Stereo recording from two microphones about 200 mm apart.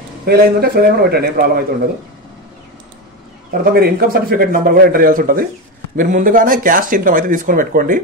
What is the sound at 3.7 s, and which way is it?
Speech, 50° right (ahead or behind).